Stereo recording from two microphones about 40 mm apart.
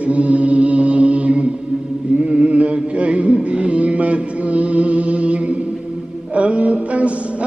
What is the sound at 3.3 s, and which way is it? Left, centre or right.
Music, right.